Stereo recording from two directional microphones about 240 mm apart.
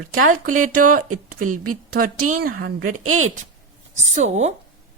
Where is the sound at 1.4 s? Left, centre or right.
Right.